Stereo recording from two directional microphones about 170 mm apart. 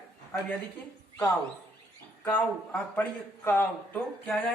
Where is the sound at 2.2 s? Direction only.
10° left (ahead or behind).